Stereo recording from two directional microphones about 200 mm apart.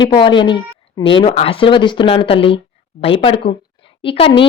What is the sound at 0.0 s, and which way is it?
Speech, 25° left (ahead or behind).